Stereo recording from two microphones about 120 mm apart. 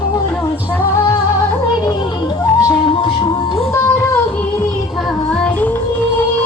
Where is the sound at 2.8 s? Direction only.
45° left (ahead or behind).